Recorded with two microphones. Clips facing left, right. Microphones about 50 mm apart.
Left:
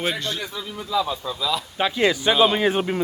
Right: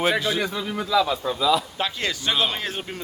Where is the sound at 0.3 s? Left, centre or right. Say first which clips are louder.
Right 5 dB; right.